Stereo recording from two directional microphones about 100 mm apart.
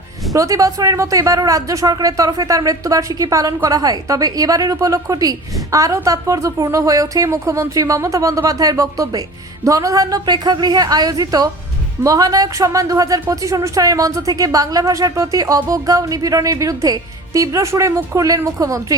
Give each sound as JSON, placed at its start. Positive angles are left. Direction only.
{"t": 0.3, "sound": "speech", "side_deg": -35}